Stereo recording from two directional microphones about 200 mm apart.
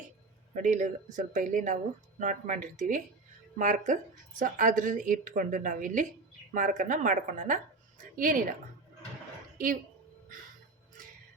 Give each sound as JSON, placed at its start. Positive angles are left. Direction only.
{"t": 0.5, "sound": "speech", "side_deg": -40}